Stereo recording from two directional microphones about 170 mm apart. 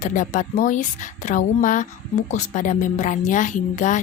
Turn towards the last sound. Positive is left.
turn(degrees=45)  # may be behind; listen again after turning